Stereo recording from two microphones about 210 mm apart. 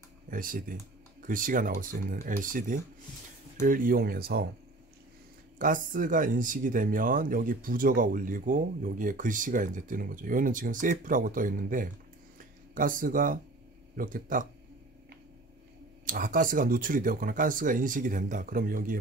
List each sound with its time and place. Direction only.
0.3 s speech: 40° right (ahead or behind)
5.6 s speech: 40° right (ahead or behind)
16.1 s speech: 40° right (ahead or behind)